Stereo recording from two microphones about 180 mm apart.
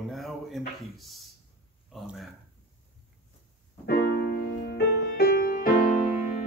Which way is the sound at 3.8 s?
60° left (ahead or behind).